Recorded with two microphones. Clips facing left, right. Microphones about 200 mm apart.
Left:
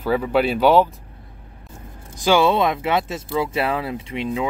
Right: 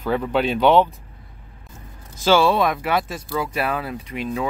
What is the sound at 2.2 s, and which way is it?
Speech, 15° left (ahead or behind).